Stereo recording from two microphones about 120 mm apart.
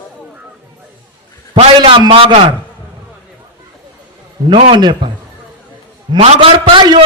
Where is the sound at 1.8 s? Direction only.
40° right (ahead or behind).